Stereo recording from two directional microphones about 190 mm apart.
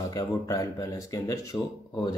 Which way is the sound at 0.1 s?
20° left (ahead or behind).